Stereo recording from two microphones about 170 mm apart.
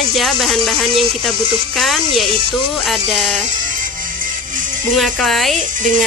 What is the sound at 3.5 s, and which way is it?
Music, 50° right (ahead or behind).